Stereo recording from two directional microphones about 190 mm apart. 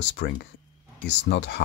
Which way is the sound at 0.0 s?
65° left (ahead or behind).